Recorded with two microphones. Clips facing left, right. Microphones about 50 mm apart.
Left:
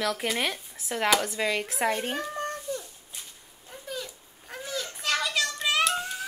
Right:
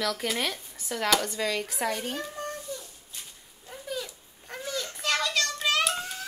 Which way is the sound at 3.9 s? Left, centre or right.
Centre.